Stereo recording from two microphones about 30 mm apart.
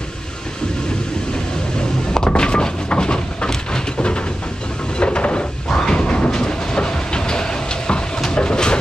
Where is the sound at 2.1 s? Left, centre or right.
Left.